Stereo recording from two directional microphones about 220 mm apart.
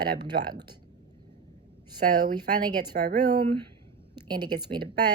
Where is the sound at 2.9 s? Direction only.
45° right (ahead or behind).